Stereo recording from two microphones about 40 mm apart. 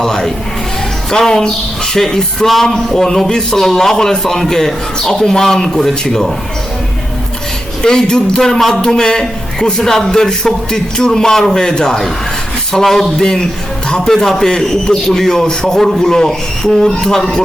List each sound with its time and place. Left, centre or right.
0.0 s speech: centre
1.9 s speech: centre
7.8 s speech: centre